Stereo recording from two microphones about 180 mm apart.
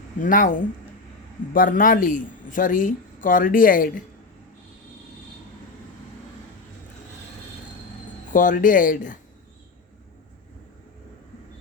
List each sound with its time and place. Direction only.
0.2 s speech: 50° left (ahead or behind)
8.3 s speech: 45° left (ahead or behind)